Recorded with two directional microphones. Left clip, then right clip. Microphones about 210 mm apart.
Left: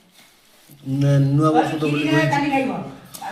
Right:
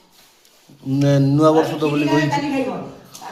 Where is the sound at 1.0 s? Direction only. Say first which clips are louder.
Right 5 dB; 35° right (ahead or behind).